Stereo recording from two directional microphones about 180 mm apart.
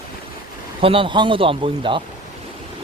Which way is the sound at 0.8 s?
30° right (ahead or behind).